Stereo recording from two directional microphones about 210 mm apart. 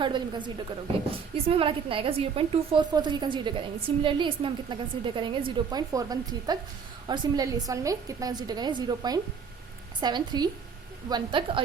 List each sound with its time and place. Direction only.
0.0 s a woman's voice: 20° right (ahead or behind)